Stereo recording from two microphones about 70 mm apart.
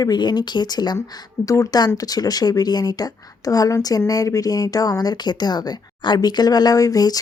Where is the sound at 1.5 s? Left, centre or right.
Left.